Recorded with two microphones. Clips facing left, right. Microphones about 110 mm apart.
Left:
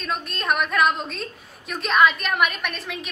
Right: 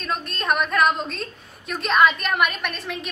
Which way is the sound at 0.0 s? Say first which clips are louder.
Right 1 dB; centre (ahead or behind).